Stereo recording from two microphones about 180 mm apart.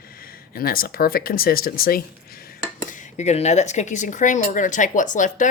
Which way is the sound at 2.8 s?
45° left (ahead or behind).